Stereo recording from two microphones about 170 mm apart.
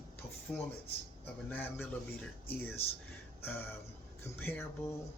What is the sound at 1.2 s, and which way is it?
Speech, 10° left (ahead or behind).